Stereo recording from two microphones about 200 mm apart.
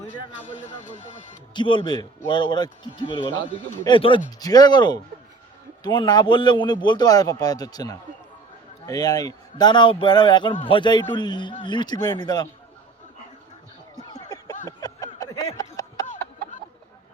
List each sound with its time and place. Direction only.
0.4 s speech: 40° left (ahead or behind)
1.5 s a man's voice: 25° left (ahead or behind)
13.9 s a sound: 20° left (ahead or behind)